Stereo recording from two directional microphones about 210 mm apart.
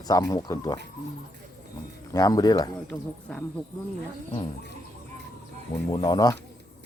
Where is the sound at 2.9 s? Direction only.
5° left (ahead or behind).